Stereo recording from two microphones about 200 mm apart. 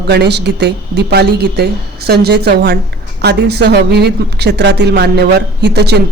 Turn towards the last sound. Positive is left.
turn(degrees=-55)  # may be behind; listen again after turning